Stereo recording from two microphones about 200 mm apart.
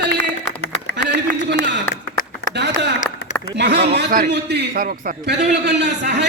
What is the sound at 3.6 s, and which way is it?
A man's voice, 55° right (ahead or behind).